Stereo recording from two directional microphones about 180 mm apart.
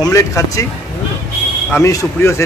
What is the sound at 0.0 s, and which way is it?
Speech, 15° left (ahead or behind).